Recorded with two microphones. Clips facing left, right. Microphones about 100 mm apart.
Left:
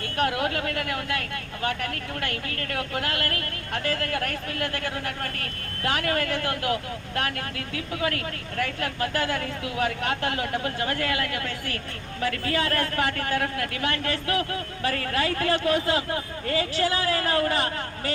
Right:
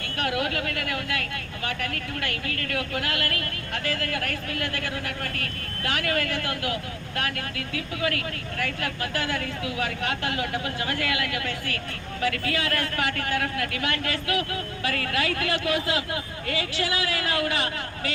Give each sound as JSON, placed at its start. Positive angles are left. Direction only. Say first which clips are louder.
{"t": 0.2, "sound": "speech", "louder": "left 2 dB", "side_deg": 35}